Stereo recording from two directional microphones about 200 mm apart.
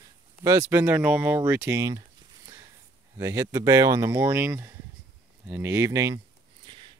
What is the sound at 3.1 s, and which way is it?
Speech, 15° right (ahead or behind).